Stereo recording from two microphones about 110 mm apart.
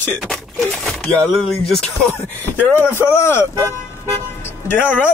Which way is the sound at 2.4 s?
15° left (ahead or behind).